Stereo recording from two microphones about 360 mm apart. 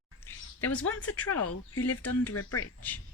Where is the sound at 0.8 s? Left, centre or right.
Left.